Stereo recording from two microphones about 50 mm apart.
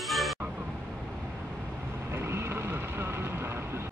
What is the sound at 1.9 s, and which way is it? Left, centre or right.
Vehicle, right.